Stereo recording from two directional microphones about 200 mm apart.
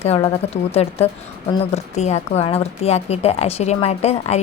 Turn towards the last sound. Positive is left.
turn(degrees=30)  # may be behind; listen again after turning